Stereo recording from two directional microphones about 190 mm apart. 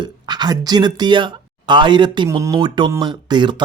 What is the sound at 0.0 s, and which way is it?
Speech, 25° right (ahead or behind).